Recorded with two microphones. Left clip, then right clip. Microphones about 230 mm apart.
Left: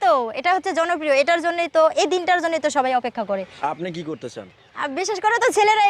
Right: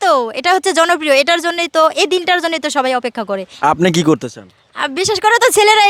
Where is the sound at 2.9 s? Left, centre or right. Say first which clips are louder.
Right 4 dB; right.